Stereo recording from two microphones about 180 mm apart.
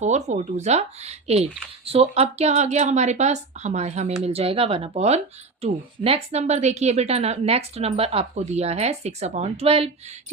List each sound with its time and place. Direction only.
0.0 s a woman's voice: 40° right (ahead or behind)